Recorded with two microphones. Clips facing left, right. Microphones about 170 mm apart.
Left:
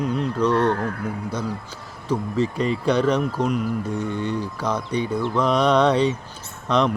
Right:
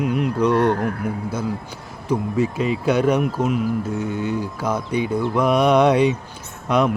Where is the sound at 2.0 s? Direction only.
10° right (ahead or behind).